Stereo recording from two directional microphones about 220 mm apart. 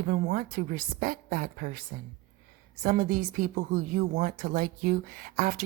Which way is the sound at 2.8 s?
40° right (ahead or behind).